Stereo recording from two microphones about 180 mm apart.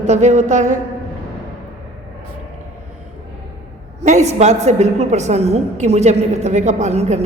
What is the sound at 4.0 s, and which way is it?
A woman's voice, 40° right (ahead or behind).